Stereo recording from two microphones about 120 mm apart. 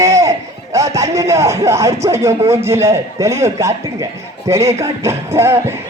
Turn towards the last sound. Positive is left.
turn(degrees=-20)  # may be behind; listen again after turning